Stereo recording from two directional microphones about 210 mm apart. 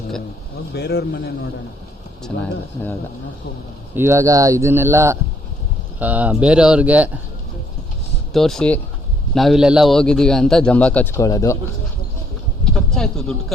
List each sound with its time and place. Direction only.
0.7 s a man's voice: 50° left (ahead or behind)
2.3 s a man's voice: 50° left (ahead or behind)
3.9 s speech: 10° right (ahead or behind)
8.3 s a man's voice: centre (ahead or behind)
12.6 s a man's voice: centre (ahead or behind)